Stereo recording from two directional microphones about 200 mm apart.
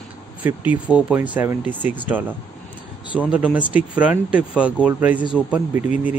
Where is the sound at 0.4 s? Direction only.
10° right (ahead or behind).